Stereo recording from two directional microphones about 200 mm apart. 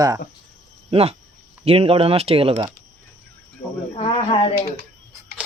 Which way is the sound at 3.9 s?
30° left (ahead or behind).